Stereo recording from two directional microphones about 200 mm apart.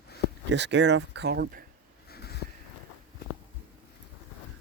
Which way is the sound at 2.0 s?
50° left (ahead or behind).